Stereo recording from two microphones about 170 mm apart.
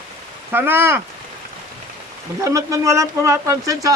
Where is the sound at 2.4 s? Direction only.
20° right (ahead or behind).